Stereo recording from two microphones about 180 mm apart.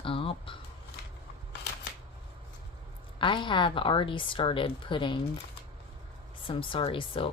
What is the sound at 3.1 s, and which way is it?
Speech, 25° left (ahead or behind).